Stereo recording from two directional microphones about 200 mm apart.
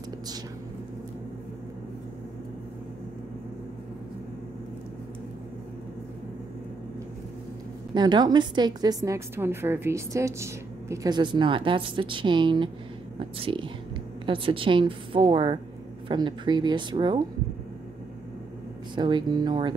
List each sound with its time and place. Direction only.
7.9 s a woman's voice: 20° right (ahead or behind)
18.9 s a woman's voice: 20° right (ahead or behind)